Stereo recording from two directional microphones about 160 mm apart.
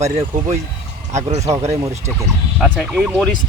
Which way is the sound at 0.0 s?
45° right (ahead or behind).